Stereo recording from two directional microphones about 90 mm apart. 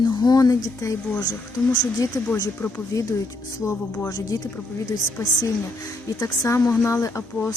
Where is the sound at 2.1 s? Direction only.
35° left (ahead or behind).